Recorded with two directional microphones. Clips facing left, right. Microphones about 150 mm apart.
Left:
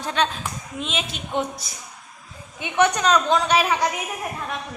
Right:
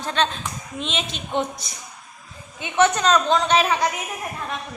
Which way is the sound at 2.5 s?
15° left (ahead or behind).